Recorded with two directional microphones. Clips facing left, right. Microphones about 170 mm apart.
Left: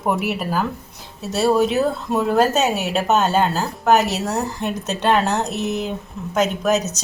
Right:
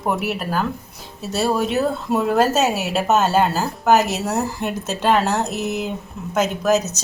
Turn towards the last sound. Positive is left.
turn(degrees=0)  # may be behind; listen again after turning